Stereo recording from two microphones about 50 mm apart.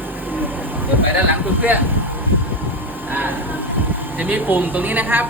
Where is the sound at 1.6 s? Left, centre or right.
Right.